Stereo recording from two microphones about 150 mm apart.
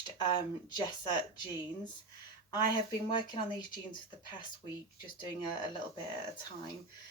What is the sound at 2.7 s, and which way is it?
Speech, 30° left (ahead or behind).